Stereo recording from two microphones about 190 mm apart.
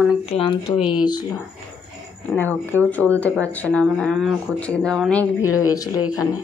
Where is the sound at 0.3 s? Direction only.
30° left (ahead or behind).